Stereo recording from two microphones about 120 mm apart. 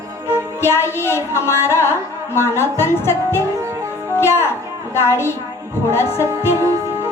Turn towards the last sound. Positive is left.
turn(degrees=20)  # may be behind; listen again after turning